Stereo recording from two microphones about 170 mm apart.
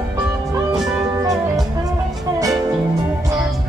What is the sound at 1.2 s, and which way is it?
Music, 20° right (ahead or behind).